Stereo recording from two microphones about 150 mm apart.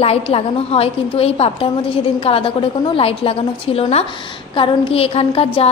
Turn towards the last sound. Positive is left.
turn(degrees=40)  # may be behind; listen again after turning